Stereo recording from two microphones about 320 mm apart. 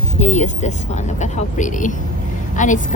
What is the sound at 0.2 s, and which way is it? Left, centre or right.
A woman's voice, left.